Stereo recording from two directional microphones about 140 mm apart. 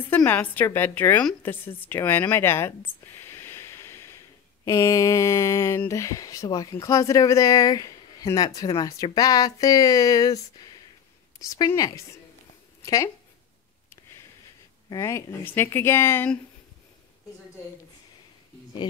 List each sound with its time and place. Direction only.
0.1 s a woman's voice: 10° left (ahead or behind)
3.2 s a sound: 20° left (ahead or behind)
4.6 s speech: 20° left (ahead or behind)
14.9 s a woman's voice: 20° left (ahead or behind)